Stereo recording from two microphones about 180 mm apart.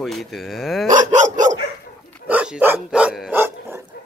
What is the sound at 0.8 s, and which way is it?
Dog, 45° right (ahead or behind).